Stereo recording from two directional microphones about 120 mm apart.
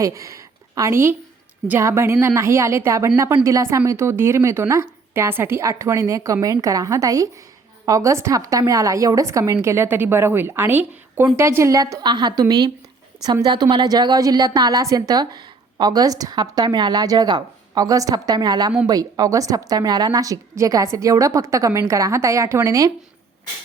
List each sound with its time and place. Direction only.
0.0 s a woman's voice: 25° right (ahead or behind)